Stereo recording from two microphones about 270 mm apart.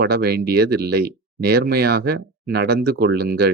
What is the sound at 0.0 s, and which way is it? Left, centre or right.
Speech, right.